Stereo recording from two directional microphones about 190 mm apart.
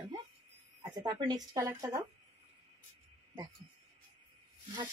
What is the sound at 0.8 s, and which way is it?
A woman's voice, 20° right (ahead or behind).